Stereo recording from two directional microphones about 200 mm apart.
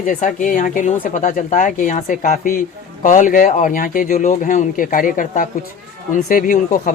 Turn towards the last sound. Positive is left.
turn(degrees=40)  # may be behind; listen again after turning